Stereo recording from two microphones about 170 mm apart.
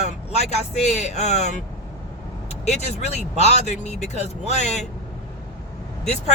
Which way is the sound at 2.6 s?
40° left (ahead or behind).